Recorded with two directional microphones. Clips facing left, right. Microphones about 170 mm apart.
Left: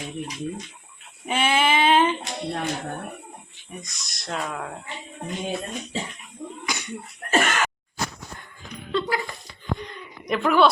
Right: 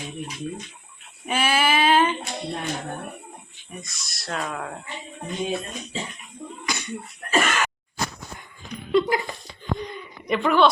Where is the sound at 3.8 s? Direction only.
20° left (ahead or behind).